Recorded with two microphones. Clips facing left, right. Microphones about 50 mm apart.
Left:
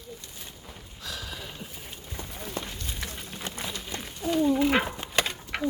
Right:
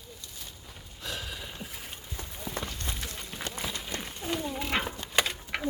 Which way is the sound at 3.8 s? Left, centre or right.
Centre.